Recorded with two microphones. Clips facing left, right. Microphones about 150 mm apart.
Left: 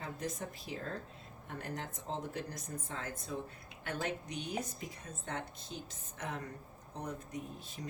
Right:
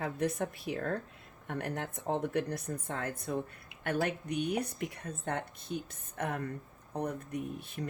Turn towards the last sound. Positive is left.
turn(degrees=-60)  # may be behind; listen again after turning